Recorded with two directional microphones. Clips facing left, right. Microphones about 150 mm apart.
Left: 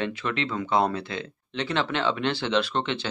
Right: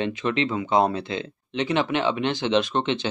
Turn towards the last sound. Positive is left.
turn(degrees=-20)  # may be behind; listen again after turning